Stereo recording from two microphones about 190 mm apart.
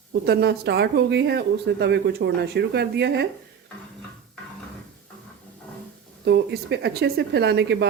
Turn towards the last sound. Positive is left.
turn(degrees=-60)  # may be behind; listen again after turning